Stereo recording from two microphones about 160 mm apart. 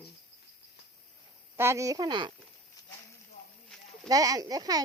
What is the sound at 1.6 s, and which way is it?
Speech, 15° right (ahead or behind).